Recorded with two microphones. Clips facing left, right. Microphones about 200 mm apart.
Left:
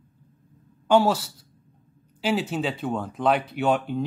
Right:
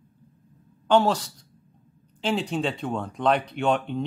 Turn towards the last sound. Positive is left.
turn(degrees=5)  # may be behind; listen again after turning